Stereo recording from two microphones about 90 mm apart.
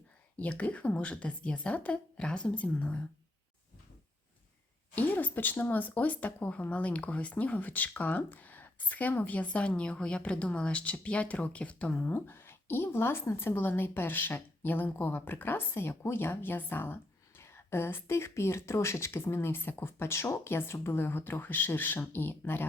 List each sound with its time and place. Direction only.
0.3 s speech: 15° left (ahead or behind)
4.9 s speech: 20° left (ahead or behind)
12.1 s a woman's voice: 25° left (ahead or behind)